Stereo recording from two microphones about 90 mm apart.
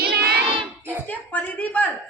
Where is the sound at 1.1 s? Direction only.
20° left (ahead or behind).